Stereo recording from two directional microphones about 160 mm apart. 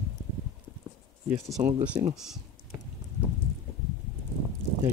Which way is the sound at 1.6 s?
10° right (ahead or behind).